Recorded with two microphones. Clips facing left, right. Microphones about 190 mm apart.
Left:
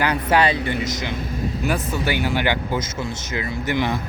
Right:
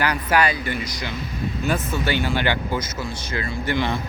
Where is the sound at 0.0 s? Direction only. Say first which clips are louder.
Left 2 dB; 25° left (ahead or behind).